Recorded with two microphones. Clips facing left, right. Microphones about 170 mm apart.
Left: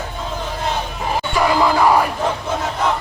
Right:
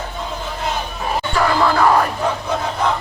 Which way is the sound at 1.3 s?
15° left (ahead or behind).